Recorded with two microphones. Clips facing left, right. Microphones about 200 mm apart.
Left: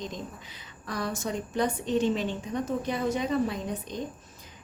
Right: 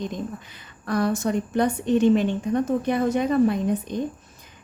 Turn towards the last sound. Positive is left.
turn(degrees=-55)  # may be behind; listen again after turning